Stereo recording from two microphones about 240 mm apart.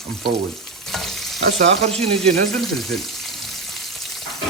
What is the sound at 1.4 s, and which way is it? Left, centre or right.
Frying, right.